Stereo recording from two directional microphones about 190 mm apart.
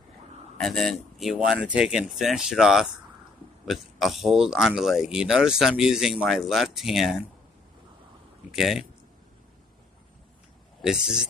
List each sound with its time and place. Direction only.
0.6 s speech: centre (ahead or behind)
8.5 s speech: centre (ahead or behind)
10.8 s speech: 5° right (ahead or behind)